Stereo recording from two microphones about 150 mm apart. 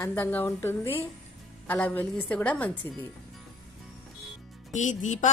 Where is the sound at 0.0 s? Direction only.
10° left (ahead or behind).